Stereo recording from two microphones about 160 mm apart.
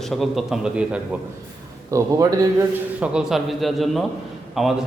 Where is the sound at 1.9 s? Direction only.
20° right (ahead or behind).